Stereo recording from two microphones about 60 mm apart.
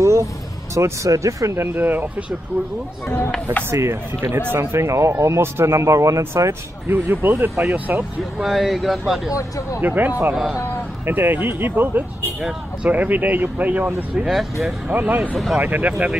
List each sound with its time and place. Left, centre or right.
0.0 s vehicle: right
0.7 s speech: right
1.6 s speech: right
3.9 s speech: right
6.9 s speech: right
7.9 s speech: right
8.4 s speech: centre
9.3 s speech: left
9.8 s speech: right
14.2 s speech: centre
14.9 s speech: right
15.3 s speech: centre
15.6 s speech: right